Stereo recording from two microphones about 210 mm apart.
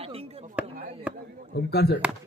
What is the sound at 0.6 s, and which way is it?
Chop, 5° right (ahead or behind).